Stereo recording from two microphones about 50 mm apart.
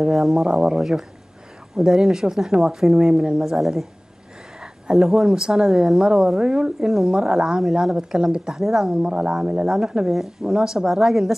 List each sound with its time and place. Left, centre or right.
0.0 s speech: centre
3.5 s speech: centre